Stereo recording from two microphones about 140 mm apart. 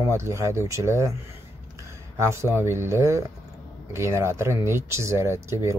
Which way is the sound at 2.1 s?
20° right (ahead or behind).